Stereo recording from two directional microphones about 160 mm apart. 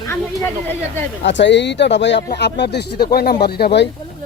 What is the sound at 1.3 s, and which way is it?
Speech, 90° left.